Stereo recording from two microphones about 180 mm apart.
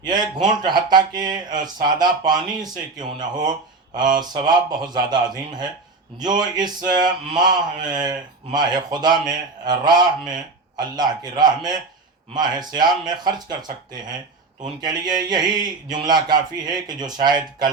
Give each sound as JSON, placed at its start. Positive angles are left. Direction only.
{"t": 0.0, "sound": "speech", "side_deg": -25}